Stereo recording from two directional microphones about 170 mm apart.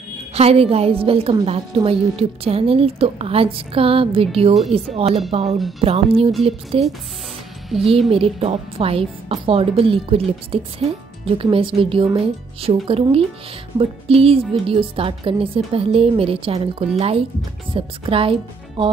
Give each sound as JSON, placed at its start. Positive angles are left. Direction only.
{"t": 0.3, "sound": "a woman's voice", "side_deg": -35}
{"t": 8.1, "sound": "a woman's voice", "side_deg": -35}